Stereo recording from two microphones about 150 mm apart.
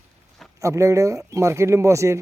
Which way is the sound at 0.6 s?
20° right (ahead or behind).